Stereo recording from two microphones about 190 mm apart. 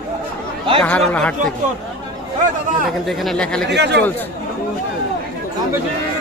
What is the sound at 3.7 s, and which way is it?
Speech, 65° right (ahead or behind).